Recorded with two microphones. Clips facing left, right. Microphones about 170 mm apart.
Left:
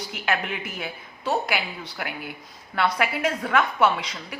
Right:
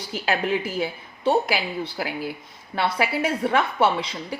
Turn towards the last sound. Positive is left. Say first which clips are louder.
# even
turn(degrees=-30)  # may be behind; listen again after turning